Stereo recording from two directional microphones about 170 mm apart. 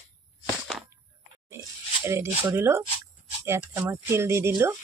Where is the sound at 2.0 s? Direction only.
15° right (ahead or behind).